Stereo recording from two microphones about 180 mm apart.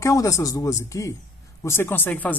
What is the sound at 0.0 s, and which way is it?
Speech, 20° left (ahead or behind).